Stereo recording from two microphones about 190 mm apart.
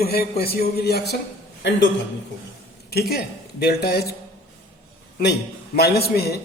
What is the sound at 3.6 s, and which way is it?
Speech, 55° left (ahead or behind).